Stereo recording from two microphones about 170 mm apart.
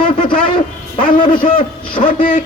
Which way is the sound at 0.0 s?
30° left (ahead or behind).